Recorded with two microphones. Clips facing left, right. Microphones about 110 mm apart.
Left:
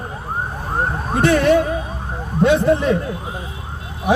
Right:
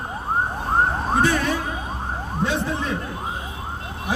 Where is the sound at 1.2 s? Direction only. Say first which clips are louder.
Left 12 dB; 70° left (ahead or behind).